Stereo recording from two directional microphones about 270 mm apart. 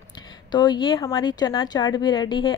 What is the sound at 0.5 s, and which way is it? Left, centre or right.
Speech, centre.